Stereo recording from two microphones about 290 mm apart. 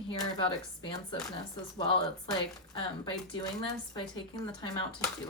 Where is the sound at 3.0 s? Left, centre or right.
Centre.